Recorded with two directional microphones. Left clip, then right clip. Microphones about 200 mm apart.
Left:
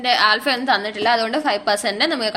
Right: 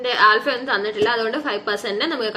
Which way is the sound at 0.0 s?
45° left (ahead or behind).